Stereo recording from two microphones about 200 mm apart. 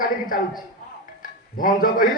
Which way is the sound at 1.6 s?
45° left (ahead or behind).